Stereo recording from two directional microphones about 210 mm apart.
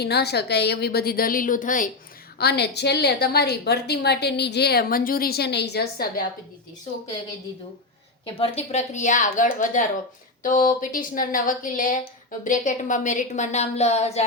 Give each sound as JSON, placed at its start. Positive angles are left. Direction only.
{"t": 0.0, "sound": "a woman's voice", "side_deg": 50}
{"t": 2.4, "sound": "a woman's voice", "side_deg": 50}
{"t": 8.2, "sound": "a woman's voice", "side_deg": 30}